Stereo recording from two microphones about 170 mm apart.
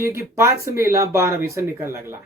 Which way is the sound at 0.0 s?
15° right (ahead or behind).